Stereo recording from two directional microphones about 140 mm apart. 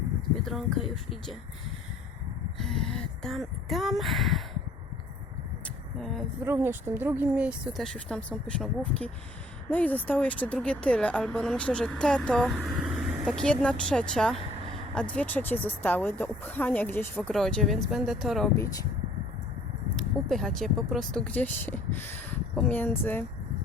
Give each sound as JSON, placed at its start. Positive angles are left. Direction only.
{"t": 0.4, "sound": "speech", "side_deg": 0}
{"t": 2.6, "sound": "speech", "side_deg": 5}
{"t": 5.6, "sound": "a sound", "side_deg": 0}
{"t": 6.4, "sound": "speech", "side_deg": -15}
{"t": 17.3, "sound": "speech", "side_deg": 0}
{"t": 18.5, "sound": "speech", "side_deg": 20}
{"t": 20.0, "sound": "speech", "side_deg": 0}